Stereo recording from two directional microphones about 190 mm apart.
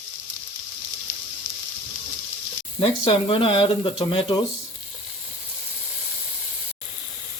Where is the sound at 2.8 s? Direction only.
30° left (ahead or behind).